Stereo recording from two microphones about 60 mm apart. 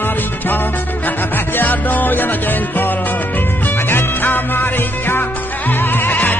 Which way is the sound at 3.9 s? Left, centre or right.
Left.